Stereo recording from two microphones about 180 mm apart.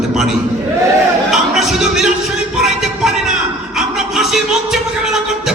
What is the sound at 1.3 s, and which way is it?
Speech, centre (ahead or behind).